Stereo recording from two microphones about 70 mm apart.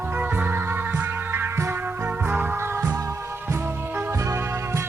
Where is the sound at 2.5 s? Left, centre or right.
Right.